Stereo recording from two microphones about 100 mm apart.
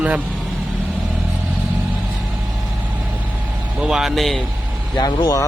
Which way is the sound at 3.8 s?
5° right (ahead or behind).